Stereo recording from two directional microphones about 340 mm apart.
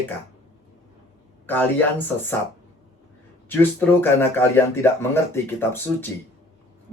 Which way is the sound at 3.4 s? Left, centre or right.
Centre.